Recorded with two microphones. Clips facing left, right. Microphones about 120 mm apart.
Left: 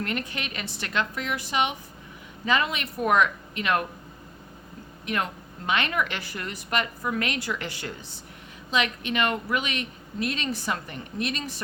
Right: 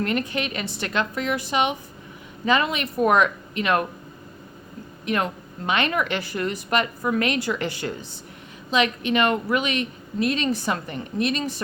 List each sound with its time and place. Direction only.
0.0 s speech: 25° right (ahead or behind)
5.0 s speech: 25° right (ahead or behind)